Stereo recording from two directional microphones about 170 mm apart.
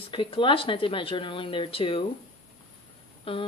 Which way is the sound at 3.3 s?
35° left (ahead or behind).